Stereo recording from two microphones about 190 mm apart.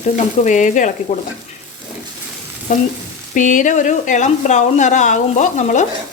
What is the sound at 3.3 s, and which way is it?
Speech, 40° left (ahead or behind).